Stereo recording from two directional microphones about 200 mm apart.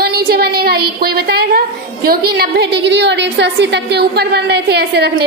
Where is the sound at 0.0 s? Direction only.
50° right (ahead or behind).